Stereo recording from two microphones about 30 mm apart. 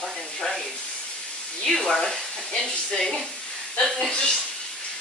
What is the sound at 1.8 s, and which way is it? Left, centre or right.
Speech, centre.